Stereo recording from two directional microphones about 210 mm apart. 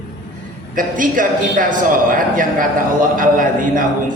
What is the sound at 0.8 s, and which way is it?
A man's voice, 40° right (ahead or behind).